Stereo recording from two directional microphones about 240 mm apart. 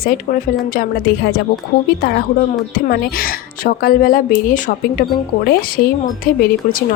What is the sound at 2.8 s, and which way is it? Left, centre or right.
A woman's voice, left.